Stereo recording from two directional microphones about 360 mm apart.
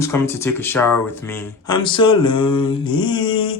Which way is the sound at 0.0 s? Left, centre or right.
Centre.